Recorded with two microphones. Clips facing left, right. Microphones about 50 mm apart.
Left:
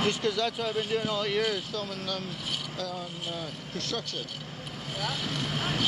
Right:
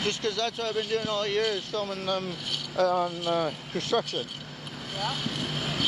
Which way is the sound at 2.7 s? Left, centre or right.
Right.